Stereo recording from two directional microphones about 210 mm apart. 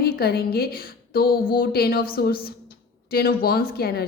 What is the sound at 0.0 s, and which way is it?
A woman's voice, 45° left (ahead or behind).